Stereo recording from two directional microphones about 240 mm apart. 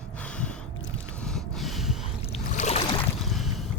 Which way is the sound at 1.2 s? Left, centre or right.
Centre.